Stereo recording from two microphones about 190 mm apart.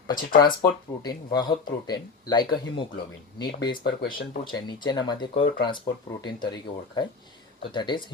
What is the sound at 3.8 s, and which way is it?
Speech, 55° left (ahead or behind).